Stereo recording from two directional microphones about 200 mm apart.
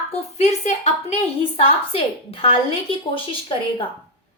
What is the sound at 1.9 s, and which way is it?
Speech, 30° left (ahead or behind).